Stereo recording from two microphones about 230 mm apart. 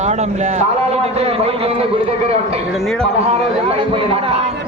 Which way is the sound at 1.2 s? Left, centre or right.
Right.